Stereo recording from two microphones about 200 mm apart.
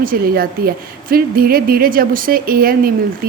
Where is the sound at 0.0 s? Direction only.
45° right (ahead or behind).